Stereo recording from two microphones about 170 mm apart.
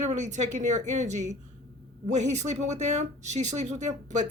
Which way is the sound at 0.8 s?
45° right (ahead or behind).